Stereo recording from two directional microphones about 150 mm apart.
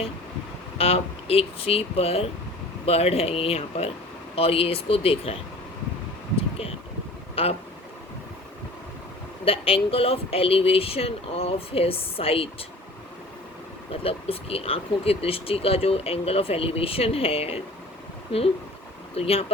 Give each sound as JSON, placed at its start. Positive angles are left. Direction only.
{"t": 0.8, "sound": "speech", "side_deg": 40}
{"t": 6.3, "sound": "a sound", "side_deg": 40}
{"t": 7.4, "sound": "speech", "side_deg": 40}
{"t": 9.4, "sound": "speech", "side_deg": 40}
{"t": 13.9, "sound": "speech", "side_deg": 40}
{"t": 19.1, "sound": "speech", "side_deg": 40}